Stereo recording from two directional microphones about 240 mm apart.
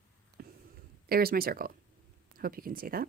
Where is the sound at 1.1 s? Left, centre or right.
Right.